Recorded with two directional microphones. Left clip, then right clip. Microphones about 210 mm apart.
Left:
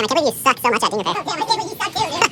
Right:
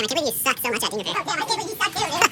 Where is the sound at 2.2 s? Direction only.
10° right (ahead or behind).